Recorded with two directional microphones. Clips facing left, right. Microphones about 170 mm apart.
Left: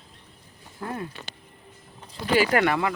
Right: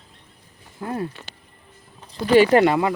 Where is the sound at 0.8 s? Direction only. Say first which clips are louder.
Right 4 dB; 20° right (ahead or behind).